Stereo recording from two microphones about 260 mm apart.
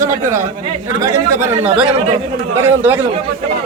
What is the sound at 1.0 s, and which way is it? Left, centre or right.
Speech, centre.